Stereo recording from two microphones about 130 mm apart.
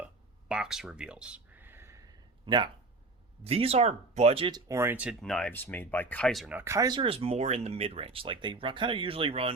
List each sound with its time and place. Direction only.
0.0 s a sound: 5° right (ahead or behind)
3.4 s speech: 50° right (ahead or behind)
4.7 s speech: 20° right (ahead or behind)
5.2 s speech: 5° left (ahead or behind)
5.5 s speech: 15° left (ahead or behind)
6.5 s speech: 15° right (ahead or behind)
6.7 s speech: 30° right (ahead or behind)
7.0 s speech: 45° right (ahead or behind)